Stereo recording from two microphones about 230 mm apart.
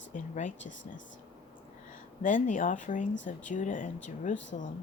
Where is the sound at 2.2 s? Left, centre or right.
Left.